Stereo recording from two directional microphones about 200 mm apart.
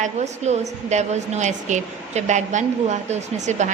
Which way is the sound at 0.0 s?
35° right (ahead or behind).